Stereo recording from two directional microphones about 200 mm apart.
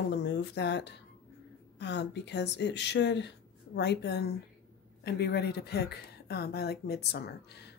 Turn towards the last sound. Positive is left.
turn(degrees=55)  # may be behind; listen again after turning